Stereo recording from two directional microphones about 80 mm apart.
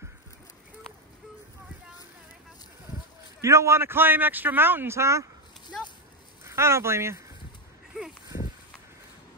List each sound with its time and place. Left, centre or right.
3.3 s speech: right
6.4 s speech: right